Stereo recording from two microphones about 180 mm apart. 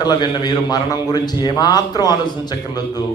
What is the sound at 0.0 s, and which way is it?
A man's voice, 25° left (ahead or behind).